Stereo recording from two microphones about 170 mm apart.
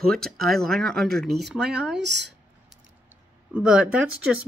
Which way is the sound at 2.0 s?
90° right.